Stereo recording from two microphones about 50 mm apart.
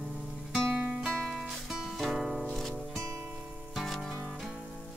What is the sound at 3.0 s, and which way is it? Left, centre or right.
Music, right.